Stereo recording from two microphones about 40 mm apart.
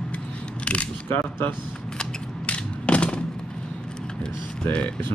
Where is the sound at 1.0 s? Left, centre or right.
Left.